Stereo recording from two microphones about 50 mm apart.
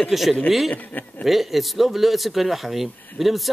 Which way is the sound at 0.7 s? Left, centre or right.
Left.